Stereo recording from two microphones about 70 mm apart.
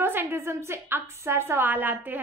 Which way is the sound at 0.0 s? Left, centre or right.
Right.